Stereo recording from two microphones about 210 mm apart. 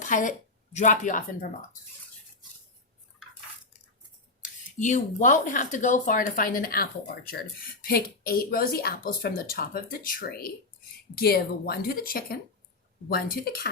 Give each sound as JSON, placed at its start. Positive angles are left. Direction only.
{"t": 0.0, "sound": "a woman's voice", "side_deg": 35}
{"t": 4.4, "sound": "a sound", "side_deg": 35}
{"t": 4.8, "sound": "speech", "side_deg": 35}